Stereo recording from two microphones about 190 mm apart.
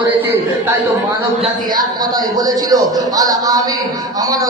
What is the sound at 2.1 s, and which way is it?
A man's voice, 20° right (ahead or behind).